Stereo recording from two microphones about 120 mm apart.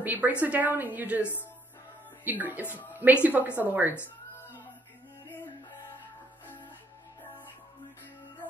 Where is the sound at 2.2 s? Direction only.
15° right (ahead or behind).